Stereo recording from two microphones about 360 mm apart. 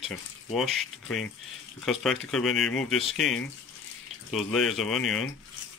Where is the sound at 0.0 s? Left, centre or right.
Centre.